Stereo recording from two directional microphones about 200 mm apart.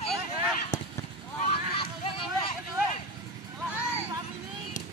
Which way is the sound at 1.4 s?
25° left (ahead or behind).